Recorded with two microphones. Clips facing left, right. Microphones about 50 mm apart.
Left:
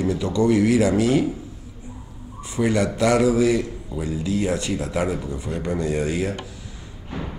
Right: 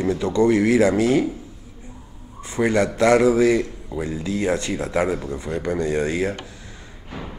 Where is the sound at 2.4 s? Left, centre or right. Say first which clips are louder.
Right 2 dB; right.